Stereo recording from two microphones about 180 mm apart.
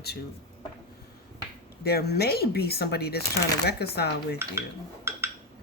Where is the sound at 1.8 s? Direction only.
60° left (ahead or behind).